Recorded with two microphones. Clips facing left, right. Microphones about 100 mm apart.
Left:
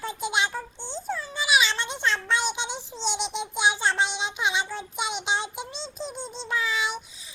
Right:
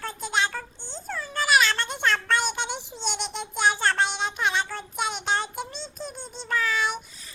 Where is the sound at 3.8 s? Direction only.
Centre (ahead or behind).